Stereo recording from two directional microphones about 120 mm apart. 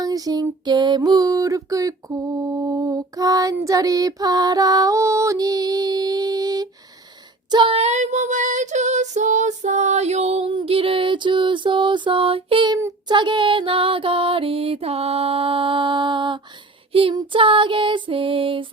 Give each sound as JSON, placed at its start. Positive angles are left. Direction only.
{"t": 0.0, "sound": "music", "side_deg": -30}
{"t": 7.5, "sound": "music", "side_deg": -45}
{"t": 7.8, "sound": "child singing", "side_deg": -70}
{"t": 10.5, "sound": "music", "side_deg": -50}
{"t": 12.7, "sound": "music", "side_deg": -35}